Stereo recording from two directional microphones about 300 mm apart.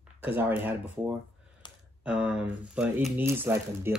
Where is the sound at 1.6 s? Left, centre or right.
Centre.